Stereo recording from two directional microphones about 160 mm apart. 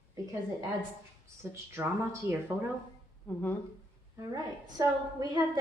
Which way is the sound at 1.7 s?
15° right (ahead or behind).